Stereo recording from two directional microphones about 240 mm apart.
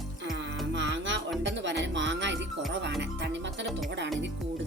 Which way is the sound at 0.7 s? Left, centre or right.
Right.